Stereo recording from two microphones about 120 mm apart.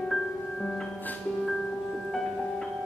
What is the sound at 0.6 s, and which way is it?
Music, 5° left (ahead or behind).